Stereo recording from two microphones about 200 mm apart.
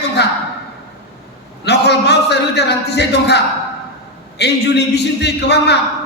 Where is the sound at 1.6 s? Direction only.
55° left (ahead or behind).